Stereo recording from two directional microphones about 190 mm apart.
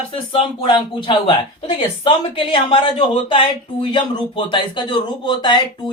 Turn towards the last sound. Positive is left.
turn(degrees=25)  # may be behind; listen again after turning